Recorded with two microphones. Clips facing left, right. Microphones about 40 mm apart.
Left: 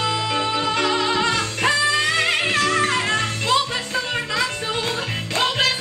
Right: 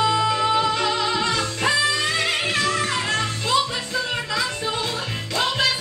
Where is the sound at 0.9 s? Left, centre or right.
Left.